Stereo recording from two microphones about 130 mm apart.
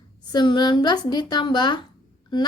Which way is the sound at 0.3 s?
35° left (ahead or behind).